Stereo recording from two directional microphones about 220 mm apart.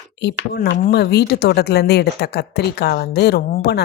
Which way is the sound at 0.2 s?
50° left (ahead or behind).